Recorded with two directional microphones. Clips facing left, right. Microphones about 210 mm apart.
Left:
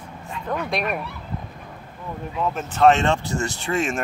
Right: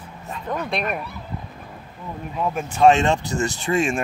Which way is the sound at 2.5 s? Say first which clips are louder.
Right 1 dB; 10° right (ahead or behind).